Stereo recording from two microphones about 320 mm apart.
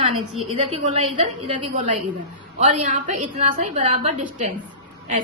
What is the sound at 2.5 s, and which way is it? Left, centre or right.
A woman's voice, right.